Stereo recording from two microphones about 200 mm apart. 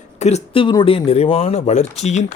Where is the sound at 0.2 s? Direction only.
35° left (ahead or behind).